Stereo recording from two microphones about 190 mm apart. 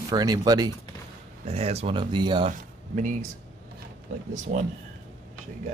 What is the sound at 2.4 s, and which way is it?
Speech, 40° right (ahead or behind).